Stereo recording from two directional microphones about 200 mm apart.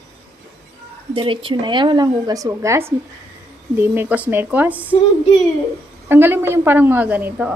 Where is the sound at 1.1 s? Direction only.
25° right (ahead or behind); by 4.9 s 10° right (ahead or behind).